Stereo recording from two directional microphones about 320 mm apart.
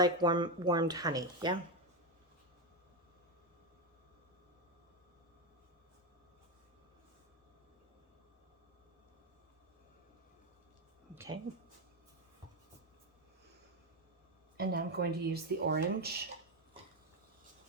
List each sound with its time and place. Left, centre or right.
0.0 s speech: centre
11.1 s a sound: centre
14.5 s speech: right